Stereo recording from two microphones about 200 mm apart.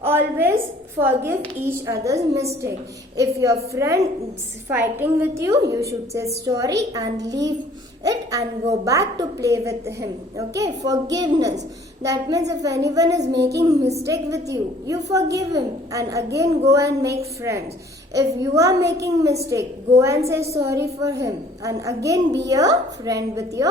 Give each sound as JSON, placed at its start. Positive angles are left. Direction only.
{"t": 0.0, "sound": "a woman's voice", "side_deg": -10}